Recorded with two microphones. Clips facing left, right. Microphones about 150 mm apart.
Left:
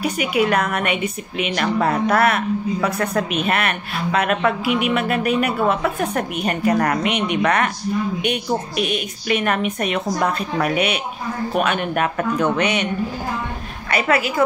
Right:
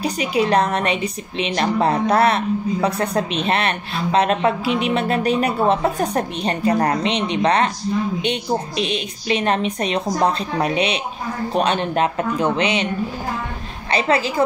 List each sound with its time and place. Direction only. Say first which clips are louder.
0.0 s a woman's voice: even; 30° right (ahead or behind)
13.9 s speech: even; 25° right (ahead or behind)